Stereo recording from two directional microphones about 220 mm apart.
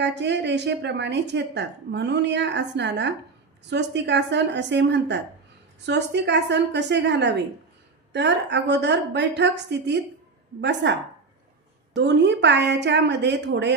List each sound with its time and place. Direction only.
0.0 s a woman's voice: 50° right (ahead or behind)
11.9 s a woman's voice: 50° right (ahead or behind)